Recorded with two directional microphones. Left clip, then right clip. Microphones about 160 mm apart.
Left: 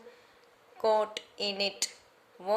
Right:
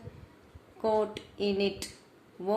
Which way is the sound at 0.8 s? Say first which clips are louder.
Left 1 dB; 45° left (ahead or behind).